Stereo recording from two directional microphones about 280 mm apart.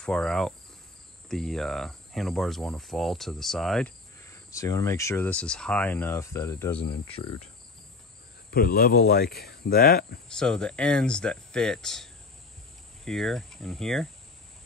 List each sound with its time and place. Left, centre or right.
0.0 s speech: centre
8.5 s speech: left
10.3 s speech: centre